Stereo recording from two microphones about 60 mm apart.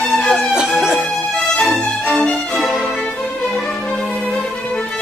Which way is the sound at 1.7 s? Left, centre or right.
Centre.